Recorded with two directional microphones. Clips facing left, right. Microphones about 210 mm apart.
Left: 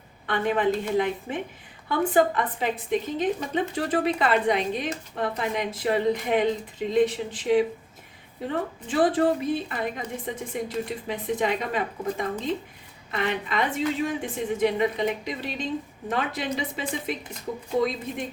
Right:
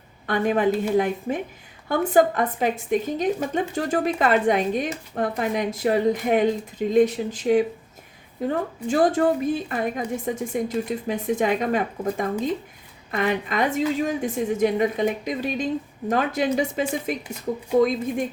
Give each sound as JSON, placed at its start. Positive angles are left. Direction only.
{"t": 0.3, "sound": "a woman's voice", "side_deg": -45}